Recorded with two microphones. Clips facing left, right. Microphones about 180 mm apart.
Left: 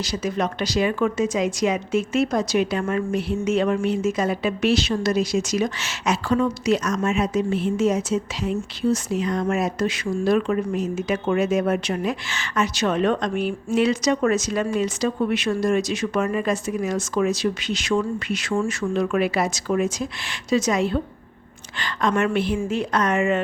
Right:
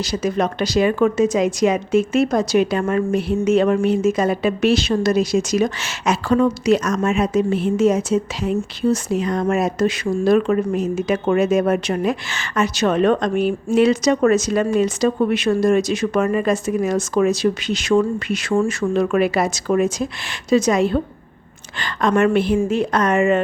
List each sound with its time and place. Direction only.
0.0 s speech: 50° right (ahead or behind)